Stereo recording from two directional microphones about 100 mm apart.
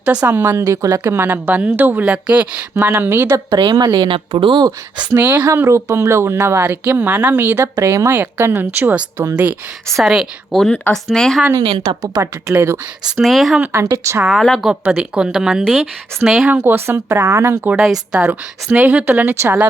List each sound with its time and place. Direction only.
0.0 s speech: 10° right (ahead or behind); by 1.0 s 35° right (ahead or behind)
1.0 s a woman's voice: 20° right (ahead or behind)
3.5 s a woman's voice: 45° right (ahead or behind)
5.1 s a woman's voice: 20° right (ahead or behind)
5.5 s a woman's voice: 30° right (ahead or behind)
9.8 s a woman's voice: centre (ahead or behind)
11.5 s a woman's voice: 50° right (ahead or behind)
12.0 s speech: 35° right (ahead or behind)
13.1 s a woman's voice: centre (ahead or behind)
13.7 s speech: 30° right (ahead or behind)
14.3 s a woman's voice: centre (ahead or behind)
14.7 s a woman's voice: 10° right (ahead or behind)
16.5 s speech: 20° right (ahead or behind)
18.1 s a woman's voice: 15° right (ahead or behind)